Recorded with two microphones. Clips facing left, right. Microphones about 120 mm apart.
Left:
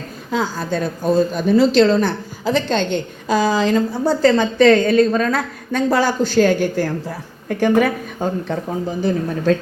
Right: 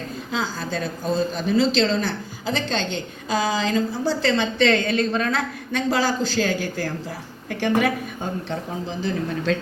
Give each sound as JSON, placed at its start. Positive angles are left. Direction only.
{"t": 0.3, "sound": "a woman's voice", "side_deg": 45}